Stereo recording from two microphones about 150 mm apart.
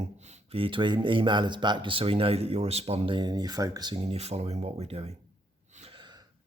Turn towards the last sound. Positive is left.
turn(degrees=-30)  # may be behind; listen again after turning